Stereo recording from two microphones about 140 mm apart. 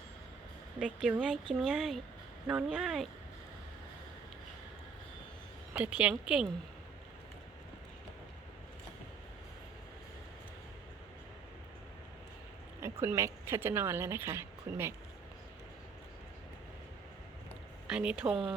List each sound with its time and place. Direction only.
1.0 s speech: 5° right (ahead or behind)
5.7 s speech: 10° right (ahead or behind)
12.8 s a woman's voice: 20° right (ahead or behind)
17.8 s speech: 5° right (ahead or behind)